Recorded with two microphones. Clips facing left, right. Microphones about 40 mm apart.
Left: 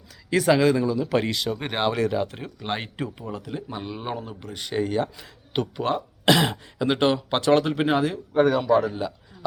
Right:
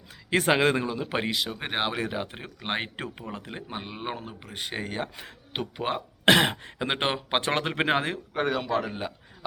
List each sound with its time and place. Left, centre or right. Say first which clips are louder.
0.3 s speech: left 3 dB; right
1.3 s speech: left 3 dB; centre; by 3.8 s right
3.8 s speech: left 3 dB; right
6.2 s speech: even; right
8.3 s speech: left 9 dB; centre
8.8 s speech: left 5 dB; right